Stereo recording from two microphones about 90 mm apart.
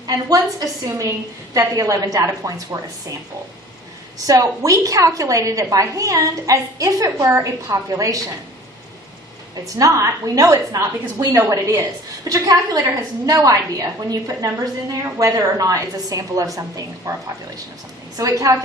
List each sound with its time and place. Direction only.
0.0 s a woman's voice: 45° right (ahead or behind)
4.3 s a woman's voice: 40° right (ahead or behind)
9.7 s a woman's voice: 40° right (ahead or behind)
18.2 s a woman's voice: 40° right (ahead or behind)